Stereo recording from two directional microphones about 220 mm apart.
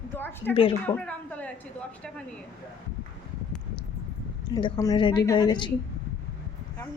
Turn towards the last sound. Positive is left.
turn(degrees=20)  # may be behind; listen again after turning